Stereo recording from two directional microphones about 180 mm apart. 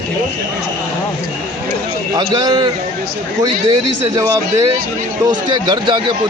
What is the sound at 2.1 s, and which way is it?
A man's voice, 20° right (ahead or behind).